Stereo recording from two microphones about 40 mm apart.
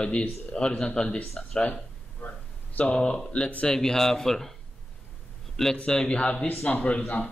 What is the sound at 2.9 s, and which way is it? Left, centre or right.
Speech, left.